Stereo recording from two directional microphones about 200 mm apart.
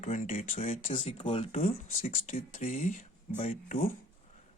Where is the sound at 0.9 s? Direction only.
25° left (ahead or behind).